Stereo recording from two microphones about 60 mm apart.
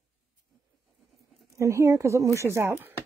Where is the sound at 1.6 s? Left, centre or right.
Right.